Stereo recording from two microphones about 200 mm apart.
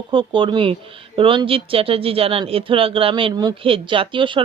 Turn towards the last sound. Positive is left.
turn(degrees=-25)  # may be behind; listen again after turning